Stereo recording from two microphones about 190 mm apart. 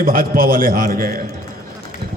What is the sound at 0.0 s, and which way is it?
A man's voice, 50° right (ahead or behind).